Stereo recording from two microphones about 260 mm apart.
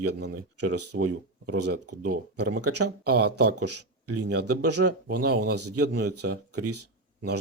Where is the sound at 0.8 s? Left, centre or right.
Right.